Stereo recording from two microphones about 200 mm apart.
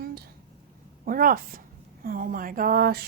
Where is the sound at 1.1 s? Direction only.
45° right (ahead or behind).